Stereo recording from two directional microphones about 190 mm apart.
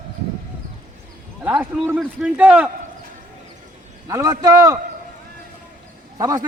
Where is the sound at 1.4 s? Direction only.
10° right (ahead or behind).